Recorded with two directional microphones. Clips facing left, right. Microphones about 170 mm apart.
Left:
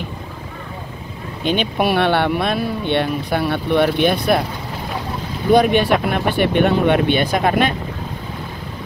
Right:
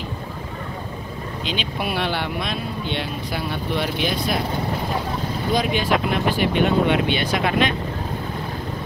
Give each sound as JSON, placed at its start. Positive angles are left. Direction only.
{"t": 1.4, "sound": "speech", "side_deg": 55}
{"t": 5.5, "sound": "speech", "side_deg": 60}